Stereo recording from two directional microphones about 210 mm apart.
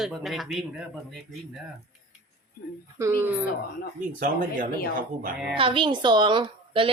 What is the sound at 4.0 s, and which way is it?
Speech, 40° right (ahead or behind).